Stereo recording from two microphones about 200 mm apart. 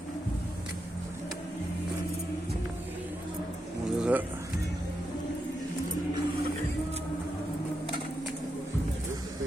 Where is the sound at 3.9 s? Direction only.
5° right (ahead or behind).